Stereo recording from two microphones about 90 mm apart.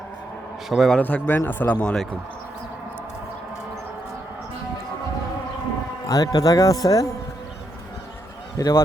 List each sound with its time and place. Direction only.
0.7 s a man's voice: centre (ahead or behind)
0.9 s speech: 20° left (ahead or behind)
6.1 s speech: 45° left (ahead or behind)
8.5 s speech: 40° left (ahead or behind)